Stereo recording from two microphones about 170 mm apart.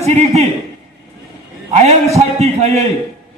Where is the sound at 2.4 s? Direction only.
40° right (ahead or behind).